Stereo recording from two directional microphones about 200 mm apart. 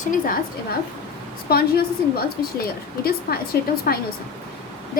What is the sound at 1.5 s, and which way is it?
A woman's voice, 50° left (ahead or behind).